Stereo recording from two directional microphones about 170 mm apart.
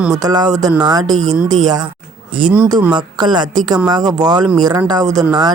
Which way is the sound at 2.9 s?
25° right (ahead or behind).